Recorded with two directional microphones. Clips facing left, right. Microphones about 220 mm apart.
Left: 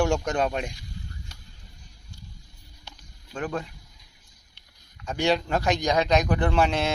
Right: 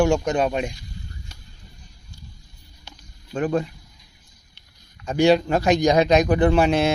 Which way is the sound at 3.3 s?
25° right (ahead or behind).